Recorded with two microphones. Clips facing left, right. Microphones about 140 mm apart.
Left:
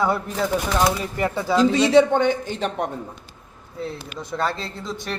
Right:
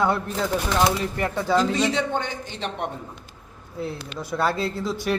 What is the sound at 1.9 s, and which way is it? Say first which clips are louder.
Speech: left 10 dB; 60° left (ahead or behind).